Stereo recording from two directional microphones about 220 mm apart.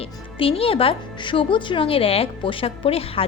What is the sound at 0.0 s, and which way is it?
A woman's voice, 25° left (ahead or behind).